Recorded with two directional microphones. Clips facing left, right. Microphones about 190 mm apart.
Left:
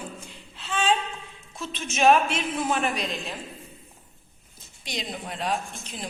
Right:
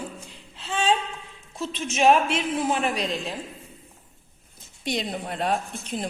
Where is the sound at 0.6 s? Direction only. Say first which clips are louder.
Right 1 dB; 30° right (ahead or behind).